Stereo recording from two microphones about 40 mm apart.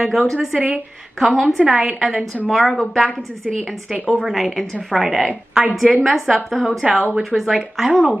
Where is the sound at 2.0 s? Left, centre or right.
Centre.